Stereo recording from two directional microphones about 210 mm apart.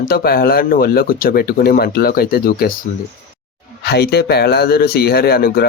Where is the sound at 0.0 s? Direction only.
45° left (ahead or behind).